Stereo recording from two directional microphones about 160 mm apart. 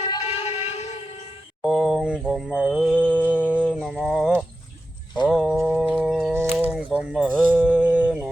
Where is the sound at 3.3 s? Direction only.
10° right (ahead or behind).